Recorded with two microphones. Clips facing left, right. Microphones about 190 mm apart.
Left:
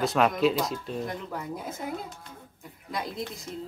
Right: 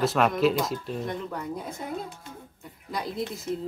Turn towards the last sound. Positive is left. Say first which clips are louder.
# right 5 dB
turn(degrees=0)  # may be behind; listen again after turning